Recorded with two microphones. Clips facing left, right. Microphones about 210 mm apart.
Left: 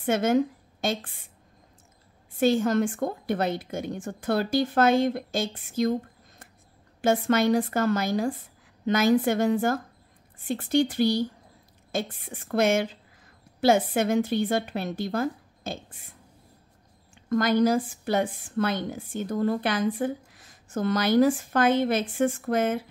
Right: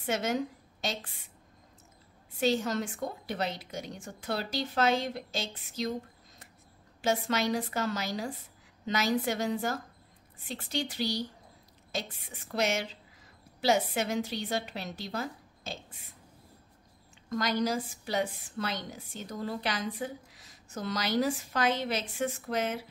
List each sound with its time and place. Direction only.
0.0 s a woman's voice: 50° left (ahead or behind)
2.4 s a woman's voice: 50° left (ahead or behind)
7.0 s a woman's voice: 50° left (ahead or behind)
17.3 s a woman's voice: 55° left (ahead or behind)